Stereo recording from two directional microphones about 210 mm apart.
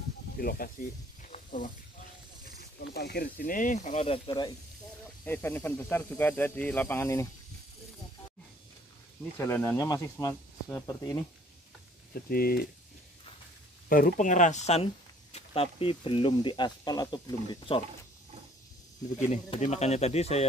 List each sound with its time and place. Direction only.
0.4 s speech: 45° left (ahead or behind)
1.3 s snake: 40° left (ahead or behind)
2.4 s speech: 50° left (ahead or behind); by 4.5 s 25° left (ahead or behind)
5.2 s speech: 10° left (ahead or behind)
9.4 s speech: 15° left (ahead or behind)
12.1 s speech: 45° left (ahead or behind)
13.8 s speech: 40° left (ahead or behind); by 17.8 s 20° left (ahead or behind)
19.3 s speech: 35° left (ahead or behind)